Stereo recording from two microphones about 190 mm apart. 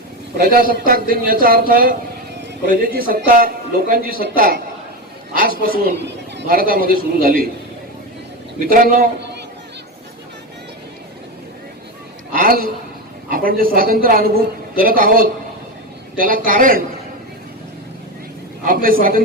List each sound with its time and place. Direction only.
0.3 s a woman's voice: 50° right (ahead or behind)
8.5 s a woman's voice: 45° right (ahead or behind)
12.3 s a sound: 50° right (ahead or behind)
13.2 s a woman's voice: 50° right (ahead or behind)
18.6 s a woman's voice: 45° right (ahead or behind)